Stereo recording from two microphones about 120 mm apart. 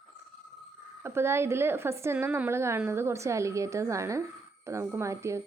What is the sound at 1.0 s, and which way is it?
A woman's voice, 20° right (ahead or behind).